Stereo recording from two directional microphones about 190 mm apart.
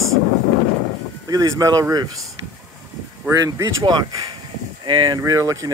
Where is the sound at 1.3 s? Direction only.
20° right (ahead or behind).